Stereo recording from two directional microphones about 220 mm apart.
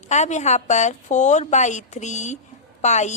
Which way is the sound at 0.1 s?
30° left (ahead or behind).